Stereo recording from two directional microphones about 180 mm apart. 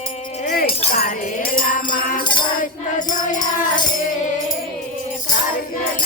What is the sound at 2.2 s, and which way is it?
Music, 25° left (ahead or behind).